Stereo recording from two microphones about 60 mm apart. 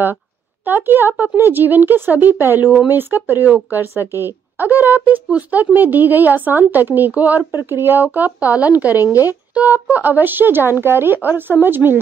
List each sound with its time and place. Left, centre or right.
0.7 s a woman's voice: right
9.5 s a woman's voice: right